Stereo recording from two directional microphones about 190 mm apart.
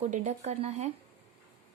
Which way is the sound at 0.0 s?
40° right (ahead or behind).